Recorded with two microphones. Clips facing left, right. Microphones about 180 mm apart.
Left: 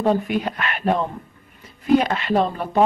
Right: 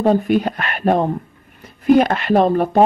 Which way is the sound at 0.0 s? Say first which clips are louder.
Right 5 dB; 40° right (ahead or behind).